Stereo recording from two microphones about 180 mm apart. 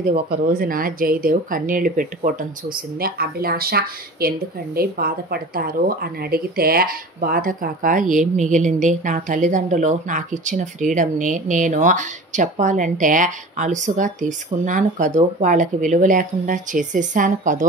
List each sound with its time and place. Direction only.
0.1 s speech: 55° right (ahead or behind)